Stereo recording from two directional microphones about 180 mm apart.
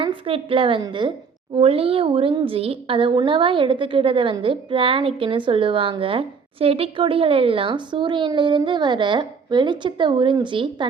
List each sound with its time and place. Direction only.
0.0 s a woman's voice: 30° right (ahead or behind)